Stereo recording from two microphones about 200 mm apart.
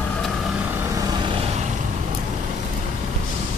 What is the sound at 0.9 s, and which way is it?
Vehicle, 20° right (ahead or behind).